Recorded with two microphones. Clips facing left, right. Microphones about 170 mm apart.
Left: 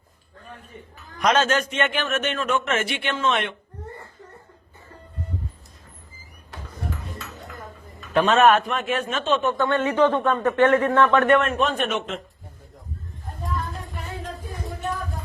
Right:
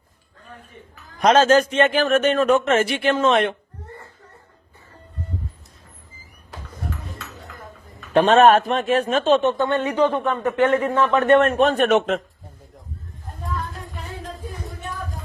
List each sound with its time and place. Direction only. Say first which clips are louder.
1.2 s a man's voice: right 6 dB; 30° right (ahead or behind)
8.3 s a man's voice: right 3 dB; 30° right (ahead or behind)
11.3 s a man's voice: right 6 dB; 40° right (ahead or behind)
11.9 s a man's voice: right 9 dB; 60° right (ahead or behind)